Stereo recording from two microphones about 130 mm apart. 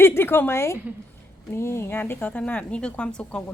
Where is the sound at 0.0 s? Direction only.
20° left (ahead or behind).